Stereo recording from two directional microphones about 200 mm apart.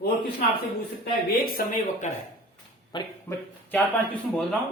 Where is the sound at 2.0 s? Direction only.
35° left (ahead or behind).